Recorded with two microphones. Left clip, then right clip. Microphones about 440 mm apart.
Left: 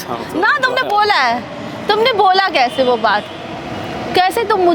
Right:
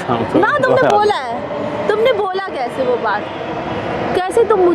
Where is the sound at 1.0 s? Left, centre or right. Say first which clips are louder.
Left 2 dB; left.